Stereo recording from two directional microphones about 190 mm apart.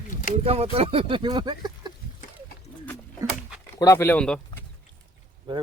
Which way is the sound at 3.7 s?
15° left (ahead or behind).